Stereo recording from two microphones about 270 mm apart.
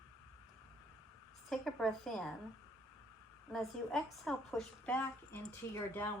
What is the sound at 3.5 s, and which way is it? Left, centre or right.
A woman's voice, centre.